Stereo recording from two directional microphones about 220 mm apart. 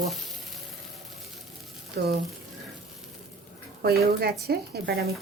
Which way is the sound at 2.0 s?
45° right (ahead or behind).